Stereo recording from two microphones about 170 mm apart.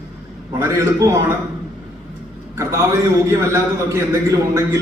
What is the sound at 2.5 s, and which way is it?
A man's voice, 20° right (ahead or behind).